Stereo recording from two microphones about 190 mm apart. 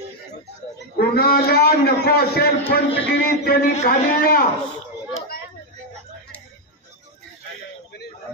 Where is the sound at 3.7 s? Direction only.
45° left (ahead or behind).